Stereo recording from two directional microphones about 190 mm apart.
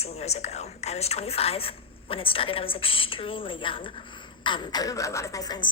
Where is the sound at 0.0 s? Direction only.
35° left (ahead or behind).